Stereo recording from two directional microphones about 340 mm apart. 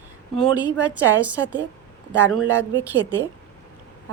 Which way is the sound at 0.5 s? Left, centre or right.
Centre.